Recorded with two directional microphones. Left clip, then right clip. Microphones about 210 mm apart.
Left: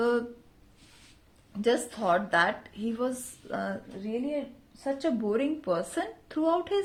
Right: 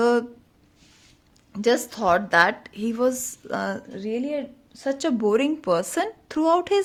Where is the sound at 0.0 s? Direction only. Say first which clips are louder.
Right 7 dB; 30° right (ahead or behind).